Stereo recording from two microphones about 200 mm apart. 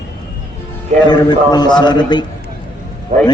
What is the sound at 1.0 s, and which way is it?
A man's voice, 20° left (ahead or behind).